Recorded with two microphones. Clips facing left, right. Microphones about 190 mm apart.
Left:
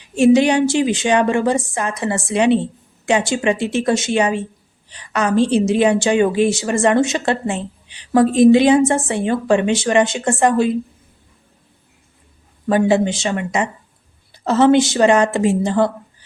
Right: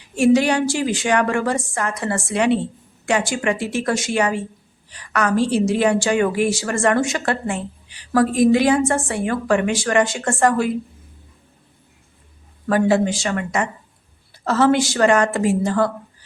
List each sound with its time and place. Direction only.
0.2 s a woman's voice: 20° left (ahead or behind)
12.6 s a woman's voice: 20° left (ahead or behind)